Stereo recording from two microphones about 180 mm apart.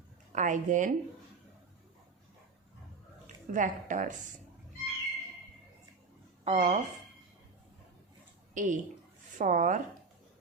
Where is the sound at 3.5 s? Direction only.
45° right (ahead or behind).